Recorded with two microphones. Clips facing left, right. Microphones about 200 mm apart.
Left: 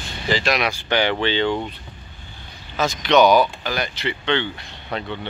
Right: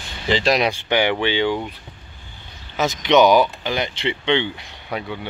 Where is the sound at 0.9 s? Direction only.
15° right (ahead or behind).